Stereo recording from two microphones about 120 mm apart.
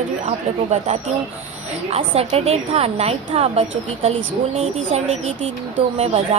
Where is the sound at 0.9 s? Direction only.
75° right (ahead or behind).